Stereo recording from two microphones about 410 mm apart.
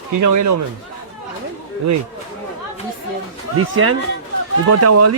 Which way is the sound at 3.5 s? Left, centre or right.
Right.